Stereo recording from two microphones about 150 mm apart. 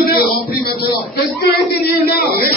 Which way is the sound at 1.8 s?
90° left.